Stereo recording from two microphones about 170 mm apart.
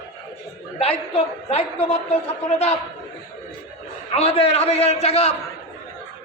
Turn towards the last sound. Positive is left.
turn(degrees=35)  # may be behind; listen again after turning